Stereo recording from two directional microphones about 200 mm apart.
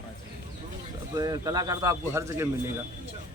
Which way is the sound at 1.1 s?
20° right (ahead or behind).